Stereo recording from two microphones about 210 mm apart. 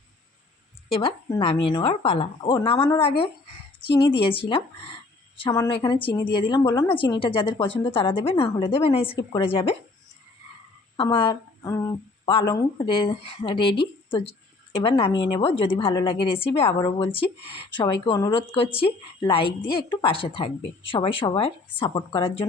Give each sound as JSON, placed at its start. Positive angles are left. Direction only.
{"t": 0.9, "sound": "a woman's voice", "side_deg": 25}
{"t": 10.9, "sound": "a woman's voice", "side_deg": 25}